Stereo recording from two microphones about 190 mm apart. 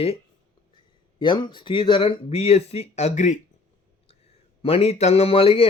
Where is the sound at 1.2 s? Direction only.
25° left (ahead or behind).